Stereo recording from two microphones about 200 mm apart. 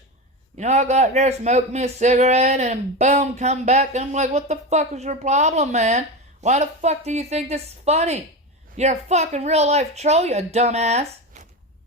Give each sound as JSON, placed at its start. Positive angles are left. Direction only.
{"t": 0.5, "sound": "a man's voice", "side_deg": -35}